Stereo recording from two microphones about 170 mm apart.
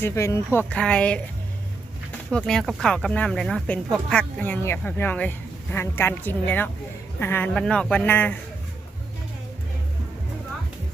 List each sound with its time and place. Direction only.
0.0 s speech: 15° left (ahead or behind)
0.7 s speech: 5° left (ahead or behind)
2.3 s speech: 5° left (ahead or behind)